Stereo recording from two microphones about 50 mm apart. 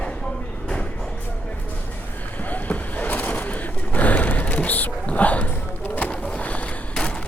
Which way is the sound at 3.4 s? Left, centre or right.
Left.